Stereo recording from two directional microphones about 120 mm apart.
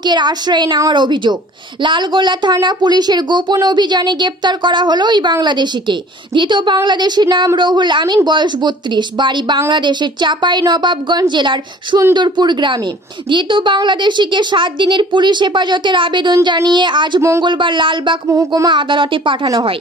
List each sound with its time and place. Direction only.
0.0 s a woman's voice: 40° right (ahead or behind)
18.3 s speech: 30° right (ahead or behind)
18.7 s speech: 45° right (ahead or behind)